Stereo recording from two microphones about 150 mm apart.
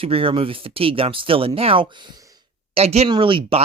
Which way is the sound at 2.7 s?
45° right (ahead or behind).